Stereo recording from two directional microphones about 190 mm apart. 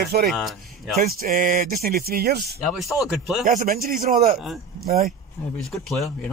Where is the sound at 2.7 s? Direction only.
Centre (ahead or behind).